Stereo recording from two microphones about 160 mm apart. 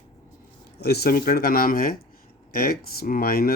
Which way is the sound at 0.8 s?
80° left.